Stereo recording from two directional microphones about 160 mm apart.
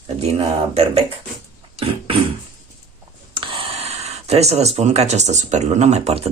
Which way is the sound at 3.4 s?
35° right (ahead or behind).